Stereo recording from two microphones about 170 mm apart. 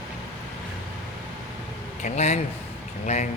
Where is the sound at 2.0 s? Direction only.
45° left (ahead or behind).